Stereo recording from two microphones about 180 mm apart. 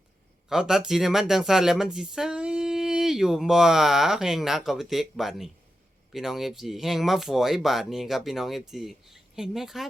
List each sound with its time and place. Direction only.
0.4 s speech: 5° right (ahead or behind)